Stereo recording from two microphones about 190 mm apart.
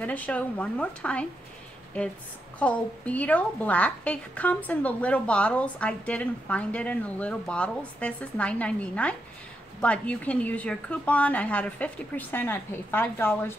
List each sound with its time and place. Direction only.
0.0 s a woman's voice: 10° left (ahead or behind)
2.6 s a woman's voice: 5° left (ahead or behind)